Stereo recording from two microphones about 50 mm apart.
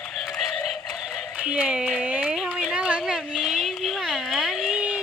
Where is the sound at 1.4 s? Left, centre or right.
Right.